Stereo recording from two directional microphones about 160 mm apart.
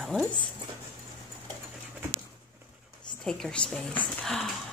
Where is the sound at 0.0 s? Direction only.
Centre (ahead or behind).